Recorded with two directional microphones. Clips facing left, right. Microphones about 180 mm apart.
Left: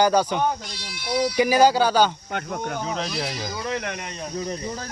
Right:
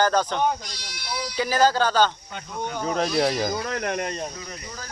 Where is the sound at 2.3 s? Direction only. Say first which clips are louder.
Left 3 dB; 60° left (ahead or behind).